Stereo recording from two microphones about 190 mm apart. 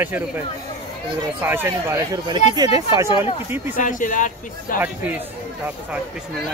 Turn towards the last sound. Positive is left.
turn(degrees=-10)  # may be behind; listen again after turning